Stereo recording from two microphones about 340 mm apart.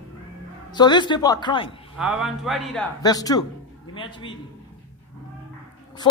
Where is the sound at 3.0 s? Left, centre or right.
Centre.